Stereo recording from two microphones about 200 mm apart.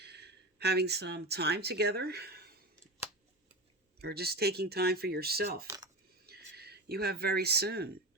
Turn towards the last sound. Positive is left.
turn(degrees=-50)  # may be behind; listen again after turning